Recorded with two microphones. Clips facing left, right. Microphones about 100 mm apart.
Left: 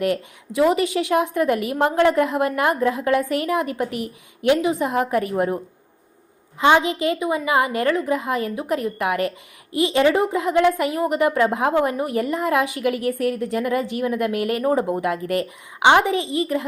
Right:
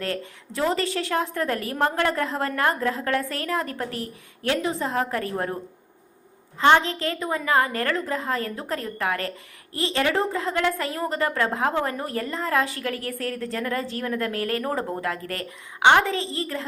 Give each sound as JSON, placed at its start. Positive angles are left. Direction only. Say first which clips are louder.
{"t": 0.0, "sound": "a woman's voice", "louder": "left 7 dB", "side_deg": 15}
{"t": 6.6, "sound": "a woman's voice", "louder": "left 2 dB", "side_deg": 15}